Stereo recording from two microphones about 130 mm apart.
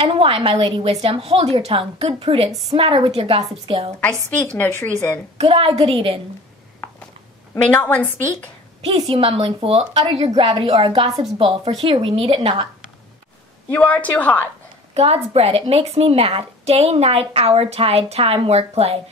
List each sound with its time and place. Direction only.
0.0 s a woman's voice: 45° right (ahead or behind)
4.6 s a woman's voice: 15° left (ahead or behind)
5.4 s a woman's voice: 45° right (ahead or behind)
7.6 s a woman's voice: 15° left (ahead or behind)
8.9 s a woman's voice: 30° right (ahead or behind)
9.2 s a woman's voice: 45° right (ahead or behind)
13.7 s a woman's voice: 10° left (ahead or behind)
15.0 s a woman's voice: 50° right (ahead or behind)